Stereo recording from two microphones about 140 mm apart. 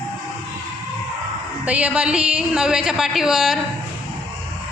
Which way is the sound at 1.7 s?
10° right (ahead or behind).